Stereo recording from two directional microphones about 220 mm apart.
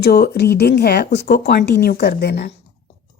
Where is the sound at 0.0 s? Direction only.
45° left (ahead or behind).